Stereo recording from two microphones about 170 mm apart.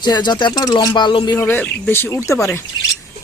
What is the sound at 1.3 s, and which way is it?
Speech, 10° left (ahead or behind).